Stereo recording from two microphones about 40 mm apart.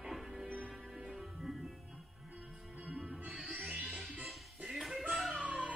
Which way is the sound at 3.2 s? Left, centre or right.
Right.